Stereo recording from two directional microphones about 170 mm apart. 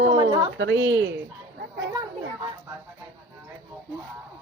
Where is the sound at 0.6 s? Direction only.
90° right.